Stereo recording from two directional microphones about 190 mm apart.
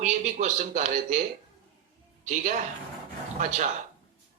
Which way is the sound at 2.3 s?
40° right (ahead or behind).